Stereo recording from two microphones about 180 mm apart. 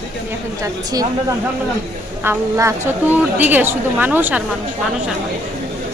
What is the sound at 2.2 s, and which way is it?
A woman's voice, 15° right (ahead or behind).